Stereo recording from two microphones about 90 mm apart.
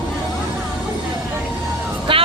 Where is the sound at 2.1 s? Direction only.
90° right.